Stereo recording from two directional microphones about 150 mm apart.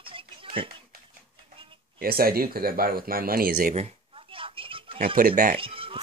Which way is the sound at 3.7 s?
40° right (ahead or behind).